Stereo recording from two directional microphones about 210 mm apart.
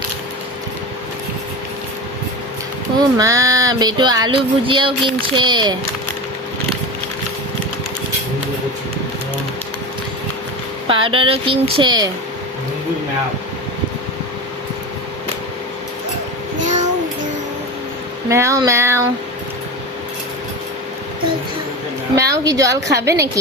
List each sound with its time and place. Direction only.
3.2 s music: 15° right (ahead or behind)
10.8 s music: 25° right (ahead or behind)
16.6 s child singing: 35° right (ahead or behind)
18.3 s a woman's voice: 15° right (ahead or behind)
22.3 s a woman's voice: 15° right (ahead or behind)